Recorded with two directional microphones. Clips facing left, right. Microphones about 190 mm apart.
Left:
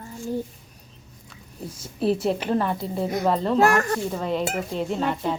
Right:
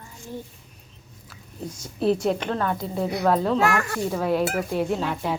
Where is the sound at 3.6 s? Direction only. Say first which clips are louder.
Left 4 dB; 40° left (ahead or behind).